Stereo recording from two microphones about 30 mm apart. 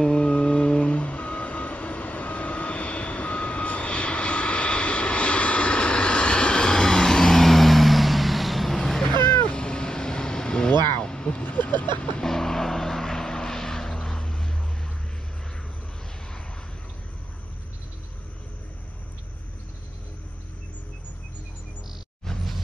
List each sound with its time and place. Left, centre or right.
0.1 s vehicle: left; by 9.1 s centre
9.5 s vehicle: left
11.4 s vehicle: left
12.3 s vehicle: centre